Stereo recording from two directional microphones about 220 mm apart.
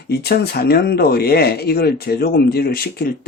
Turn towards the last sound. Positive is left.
turn(degrees=45)  # may be behind; listen again after turning